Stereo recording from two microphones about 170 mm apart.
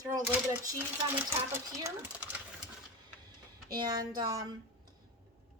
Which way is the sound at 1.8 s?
10° right (ahead or behind).